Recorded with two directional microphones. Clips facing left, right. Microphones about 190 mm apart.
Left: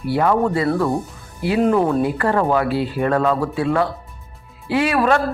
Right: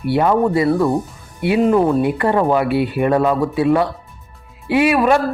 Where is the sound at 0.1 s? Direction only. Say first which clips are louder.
Right 2 dB; 20° right (ahead or behind).